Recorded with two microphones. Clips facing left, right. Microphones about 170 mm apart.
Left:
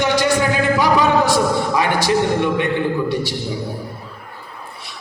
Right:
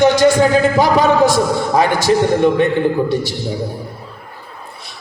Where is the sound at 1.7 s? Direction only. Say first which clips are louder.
Right 4 dB; 45° right (ahead or behind).